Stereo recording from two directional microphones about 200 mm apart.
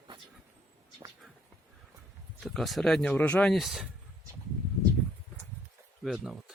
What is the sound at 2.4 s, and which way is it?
Speech, centre (ahead or behind).